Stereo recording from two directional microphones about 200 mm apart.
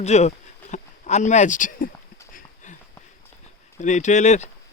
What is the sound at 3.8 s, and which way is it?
Speech, 35° left (ahead or behind).